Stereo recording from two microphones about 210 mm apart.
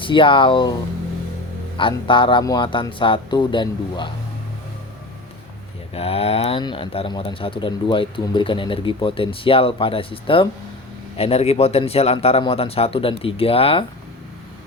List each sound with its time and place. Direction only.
0.0 s speech: 25° left (ahead or behind)
1.8 s speech: 25° left (ahead or behind)
5.9 s speech: 30° left (ahead or behind)